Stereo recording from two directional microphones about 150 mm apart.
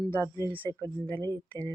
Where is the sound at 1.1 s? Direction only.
30° right (ahead or behind).